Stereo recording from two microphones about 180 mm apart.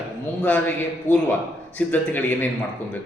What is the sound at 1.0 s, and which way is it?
A man's voice, 10° left (ahead or behind).